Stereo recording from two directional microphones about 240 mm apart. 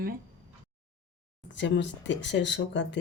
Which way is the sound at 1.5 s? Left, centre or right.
Left.